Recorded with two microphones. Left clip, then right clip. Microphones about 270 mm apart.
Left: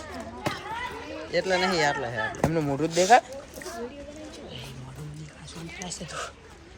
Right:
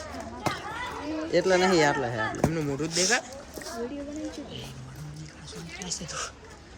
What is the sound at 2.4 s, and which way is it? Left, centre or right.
Speech, centre.